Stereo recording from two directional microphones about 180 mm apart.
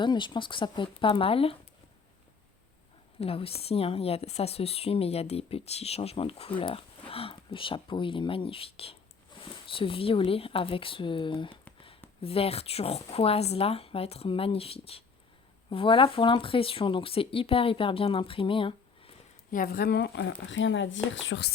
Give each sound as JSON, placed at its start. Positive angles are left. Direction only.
{"t": 0.0, "sound": "speech", "side_deg": 25}
{"t": 3.2, "sound": "speech", "side_deg": 30}
{"t": 19.5, "sound": "speech", "side_deg": 50}
{"t": 20.5, "sound": "speech", "side_deg": 90}